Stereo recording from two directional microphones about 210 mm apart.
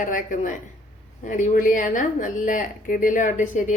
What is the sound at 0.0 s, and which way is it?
Speech, 40° left (ahead or behind).